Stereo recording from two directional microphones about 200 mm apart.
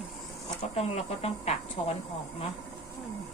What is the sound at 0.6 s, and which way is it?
Speech, 30° left (ahead or behind).